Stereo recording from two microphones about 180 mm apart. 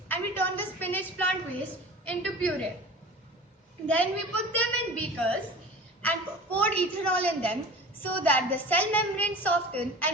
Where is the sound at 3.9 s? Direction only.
10° left (ahead or behind).